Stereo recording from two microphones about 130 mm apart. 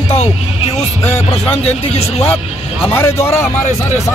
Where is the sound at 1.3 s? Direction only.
50° left (ahead or behind).